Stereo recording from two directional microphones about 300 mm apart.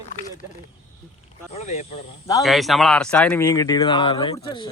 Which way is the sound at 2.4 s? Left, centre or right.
Centre.